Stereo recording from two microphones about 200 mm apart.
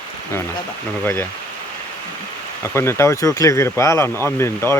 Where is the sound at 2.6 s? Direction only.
15° left (ahead or behind).